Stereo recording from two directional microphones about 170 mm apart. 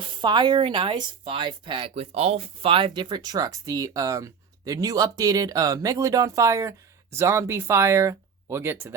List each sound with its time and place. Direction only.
0.0 s speech: 30° right (ahead or behind)